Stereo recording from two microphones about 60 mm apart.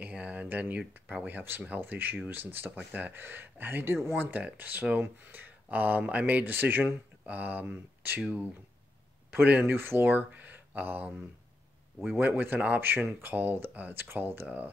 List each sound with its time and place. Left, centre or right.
0.0 s a sound: right
0.7 s speech: right
9.3 s speech: right